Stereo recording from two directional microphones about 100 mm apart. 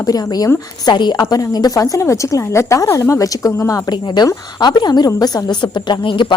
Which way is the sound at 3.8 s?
45° left (ahead or behind).